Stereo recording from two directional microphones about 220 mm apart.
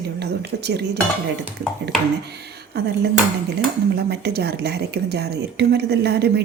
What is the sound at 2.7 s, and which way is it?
Speech, 50° right (ahead or behind).